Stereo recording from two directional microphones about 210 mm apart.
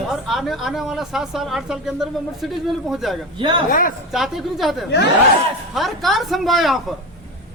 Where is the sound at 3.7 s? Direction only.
40° left (ahead or behind).